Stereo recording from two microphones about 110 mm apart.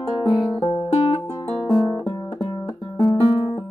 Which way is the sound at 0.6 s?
45° left (ahead or behind).